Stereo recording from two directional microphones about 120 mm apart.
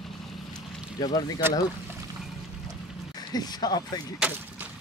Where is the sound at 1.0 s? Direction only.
35° left (ahead or behind).